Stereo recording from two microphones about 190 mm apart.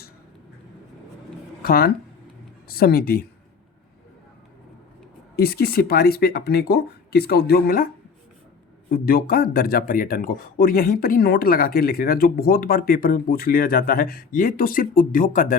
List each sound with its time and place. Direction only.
1.6 s speech: 50° left (ahead or behind)
5.4 s speech: 55° left (ahead or behind)
8.9 s speech: 50° left (ahead or behind)